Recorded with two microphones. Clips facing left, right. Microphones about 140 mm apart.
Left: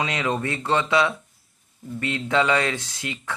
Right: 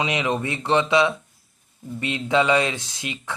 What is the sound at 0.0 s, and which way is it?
Speech, 15° right (ahead or behind).